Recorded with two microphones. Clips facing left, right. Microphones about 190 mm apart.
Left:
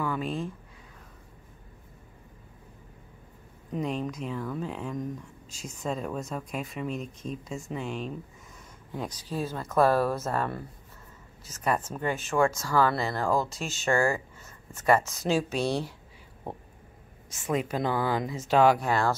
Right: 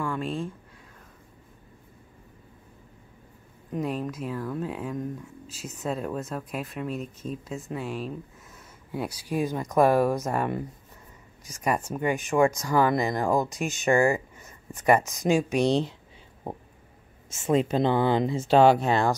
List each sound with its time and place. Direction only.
0.0 s a sound: centre (ahead or behind)
3.7 s speech: 5° right (ahead or behind); by 15.9 s 20° right (ahead or behind)
17.3 s speech: 25° right (ahead or behind)